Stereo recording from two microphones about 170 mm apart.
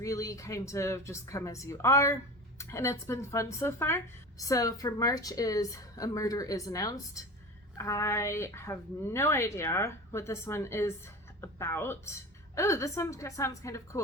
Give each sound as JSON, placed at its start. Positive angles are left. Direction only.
{"t": 0.0, "sound": "a woman's voice", "side_deg": 20}